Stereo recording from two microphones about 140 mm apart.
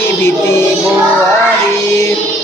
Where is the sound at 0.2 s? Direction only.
15° left (ahead or behind).